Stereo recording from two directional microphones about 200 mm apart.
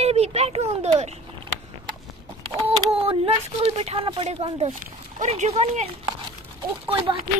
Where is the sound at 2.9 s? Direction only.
30° right (ahead or behind).